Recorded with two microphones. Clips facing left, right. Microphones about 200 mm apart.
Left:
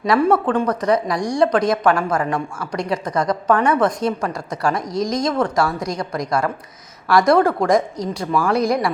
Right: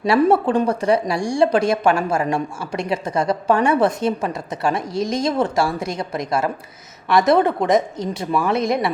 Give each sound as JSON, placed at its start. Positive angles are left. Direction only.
{"t": 0.0, "sound": "speech", "side_deg": -25}